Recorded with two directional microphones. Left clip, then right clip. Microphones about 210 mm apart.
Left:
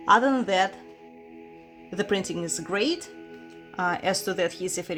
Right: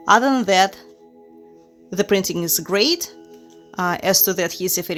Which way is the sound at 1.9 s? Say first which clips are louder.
Right 8 dB; 40° right (ahead or behind).